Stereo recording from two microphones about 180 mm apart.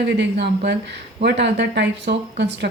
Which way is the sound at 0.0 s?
70° right (ahead or behind).